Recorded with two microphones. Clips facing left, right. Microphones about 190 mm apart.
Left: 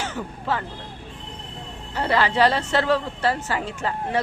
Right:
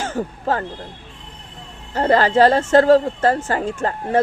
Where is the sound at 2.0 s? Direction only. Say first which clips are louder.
Right 6 dB; 45° right (ahead or behind).